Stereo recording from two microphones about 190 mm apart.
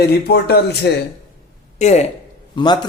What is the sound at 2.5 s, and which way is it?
Speech, 25° left (ahead or behind).